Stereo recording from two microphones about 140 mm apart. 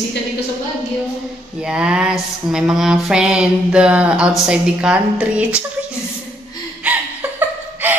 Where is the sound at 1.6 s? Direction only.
5° right (ahead or behind).